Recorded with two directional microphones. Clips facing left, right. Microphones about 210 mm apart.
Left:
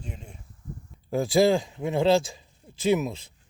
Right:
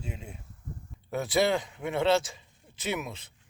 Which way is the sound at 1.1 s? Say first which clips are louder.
Left 5 dB; 30° left (ahead or behind).